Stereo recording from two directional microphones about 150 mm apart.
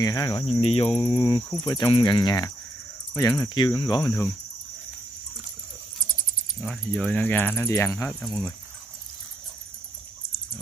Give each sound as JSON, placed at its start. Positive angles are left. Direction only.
{"t": 0.0, "sound": "cricket", "side_deg": 25}
{"t": 0.6, "sound": "cricket", "side_deg": 45}
{"t": 6.6, "sound": "speech", "side_deg": 0}
{"t": 8.2, "sound": "speech", "side_deg": 5}